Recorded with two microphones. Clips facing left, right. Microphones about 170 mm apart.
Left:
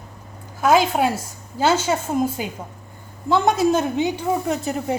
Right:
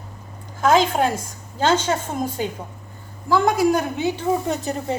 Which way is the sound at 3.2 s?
20° left (ahead or behind).